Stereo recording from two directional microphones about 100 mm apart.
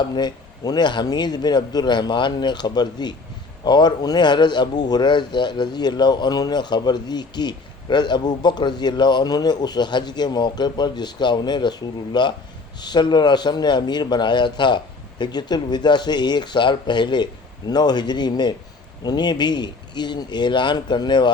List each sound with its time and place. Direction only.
0.1 s a man's voice: 45° left (ahead or behind)